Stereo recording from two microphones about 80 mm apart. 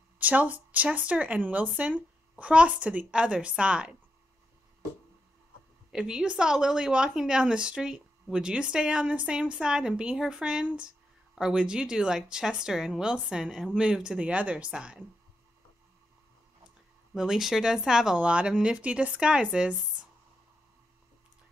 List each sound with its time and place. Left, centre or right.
0.2 s a woman's voice: centre
5.9 s a woman's voice: centre
17.1 s a woman's voice: centre